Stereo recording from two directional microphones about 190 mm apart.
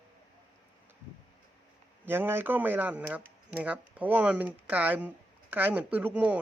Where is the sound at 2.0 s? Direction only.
10° right (ahead or behind).